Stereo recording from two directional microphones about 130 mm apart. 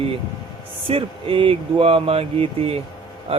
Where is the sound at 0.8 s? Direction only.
45° right (ahead or behind).